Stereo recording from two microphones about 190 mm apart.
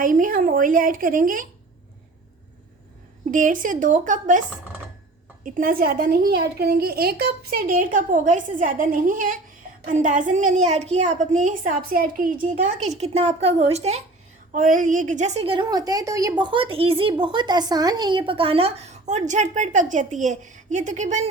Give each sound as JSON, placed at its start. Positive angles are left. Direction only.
{"t": 0.0, "sound": "a woman's voice", "side_deg": -45}
{"t": 3.3, "sound": "a woman's voice", "side_deg": -45}